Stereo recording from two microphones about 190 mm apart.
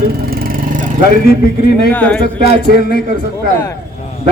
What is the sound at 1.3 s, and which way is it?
Speech, 55° left (ahead or behind).